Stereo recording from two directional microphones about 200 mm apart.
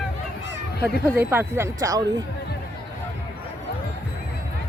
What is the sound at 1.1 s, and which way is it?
Speech, 10° right (ahead or behind).